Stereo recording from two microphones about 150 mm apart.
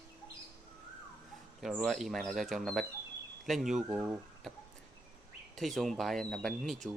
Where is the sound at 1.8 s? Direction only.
Centre (ahead or behind).